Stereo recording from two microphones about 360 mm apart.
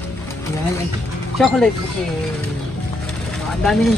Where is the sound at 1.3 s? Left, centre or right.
Centre.